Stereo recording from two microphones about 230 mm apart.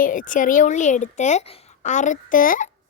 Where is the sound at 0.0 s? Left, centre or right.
Left.